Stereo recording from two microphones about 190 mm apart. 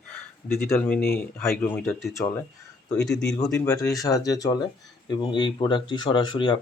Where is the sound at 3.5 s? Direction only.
15° left (ahead or behind).